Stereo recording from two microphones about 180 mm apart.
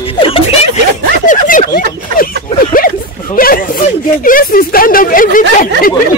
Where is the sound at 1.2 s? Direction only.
50° left (ahead or behind).